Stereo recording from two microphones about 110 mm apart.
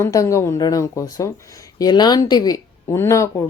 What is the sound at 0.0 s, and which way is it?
Speech, 30° left (ahead or behind).